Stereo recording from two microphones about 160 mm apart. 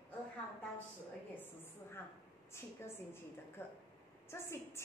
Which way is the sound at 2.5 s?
15° left (ahead or behind).